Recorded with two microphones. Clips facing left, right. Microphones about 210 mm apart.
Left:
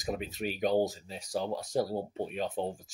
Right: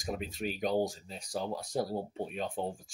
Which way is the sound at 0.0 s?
Centre (ahead or behind).